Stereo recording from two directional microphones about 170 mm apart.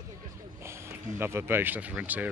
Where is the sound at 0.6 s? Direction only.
15° right (ahead or behind).